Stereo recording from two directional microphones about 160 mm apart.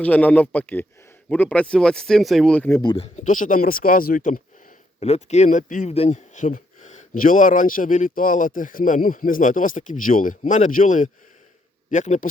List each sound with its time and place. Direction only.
0.0 s a man's voice: 10° left (ahead or behind)
2.8 s speech: 35° left (ahead or behind)
3.2 s speech: 55° left (ahead or behind)
4.9 s speech: 40° left (ahead or behind)